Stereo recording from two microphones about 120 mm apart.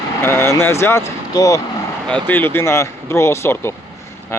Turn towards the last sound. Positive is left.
turn(degrees=20)  # may be behind; listen again after turning